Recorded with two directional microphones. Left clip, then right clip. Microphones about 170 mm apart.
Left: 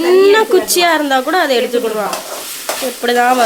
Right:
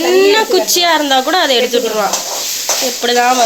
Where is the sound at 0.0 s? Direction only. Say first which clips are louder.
Left 1 dB; 20° left (ahead or behind).